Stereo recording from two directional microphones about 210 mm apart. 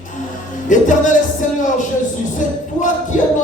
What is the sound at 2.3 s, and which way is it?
Music, 35° left (ahead or behind).